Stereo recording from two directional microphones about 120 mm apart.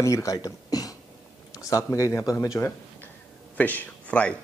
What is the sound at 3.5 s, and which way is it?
Speech, 15° left (ahead or behind).